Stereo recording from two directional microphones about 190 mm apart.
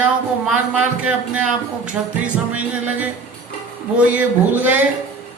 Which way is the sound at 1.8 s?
5° right (ahead or behind).